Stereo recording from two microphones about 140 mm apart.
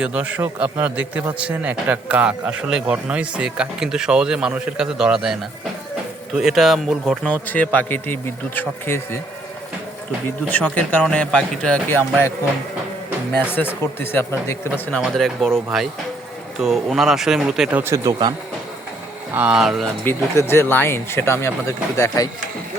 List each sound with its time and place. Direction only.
0.0 s a man's voice: 10° right (ahead or behind)
7.4 s speech: 10° left (ahead or behind)
10.5 s speech: 10° left (ahead or behind)
13.5 s speech: 15° left (ahead or behind)
14.8 s speech: 5° left (ahead or behind)
17.9 s speech: 30° right (ahead or behind)
19.3 s speech: 10° right (ahead or behind)
20.1 s speech: 15° left (ahead or behind)